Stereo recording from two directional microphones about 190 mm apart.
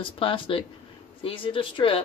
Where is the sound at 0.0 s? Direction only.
30° left (ahead or behind).